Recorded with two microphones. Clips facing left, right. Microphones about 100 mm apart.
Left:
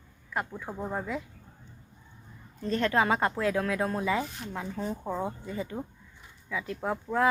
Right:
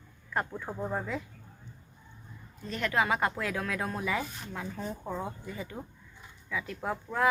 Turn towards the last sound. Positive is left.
turn(degrees=15)  # may be behind; listen again after turning